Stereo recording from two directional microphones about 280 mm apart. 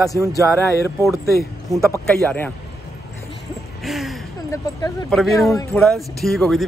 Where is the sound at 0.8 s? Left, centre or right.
Centre.